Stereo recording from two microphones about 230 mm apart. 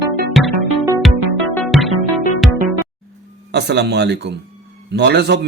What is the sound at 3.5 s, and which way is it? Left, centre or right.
A man's voice, right.